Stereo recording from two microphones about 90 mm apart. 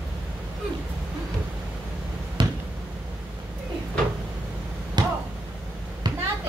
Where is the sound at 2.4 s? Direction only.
65° right (ahead or behind).